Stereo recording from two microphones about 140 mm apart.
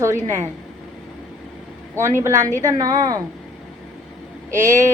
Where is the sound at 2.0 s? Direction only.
20° right (ahead or behind).